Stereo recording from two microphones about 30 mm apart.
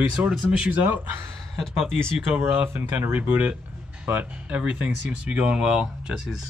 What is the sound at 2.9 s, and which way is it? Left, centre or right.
Speech, right.